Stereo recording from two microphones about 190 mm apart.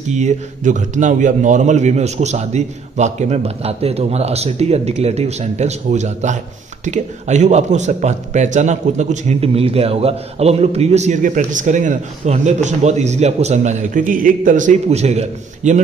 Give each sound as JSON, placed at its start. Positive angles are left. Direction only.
{"t": 0.1, "sound": "a man's voice", "side_deg": -40}